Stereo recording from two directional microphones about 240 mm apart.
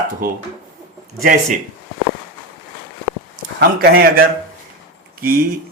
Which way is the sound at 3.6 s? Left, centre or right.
Right.